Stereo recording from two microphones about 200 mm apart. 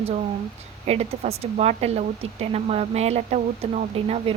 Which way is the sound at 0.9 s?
30° right (ahead or behind).